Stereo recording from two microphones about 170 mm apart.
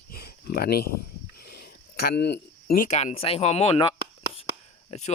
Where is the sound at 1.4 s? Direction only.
65° left (ahead or behind).